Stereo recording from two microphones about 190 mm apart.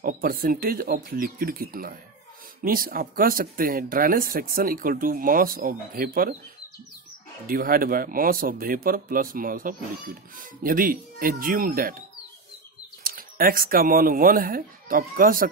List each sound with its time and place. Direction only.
0.0 s speech: 50° right (ahead or behind)
7.4 s speech: 50° right (ahead or behind)
13.0 s speech: 50° right (ahead or behind)